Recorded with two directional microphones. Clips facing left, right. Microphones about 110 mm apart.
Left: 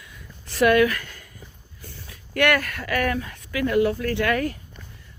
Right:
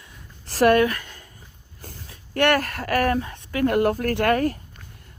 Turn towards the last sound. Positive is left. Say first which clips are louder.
# right 3 dB
turn(degrees=-45)  # may be behind; listen again after turning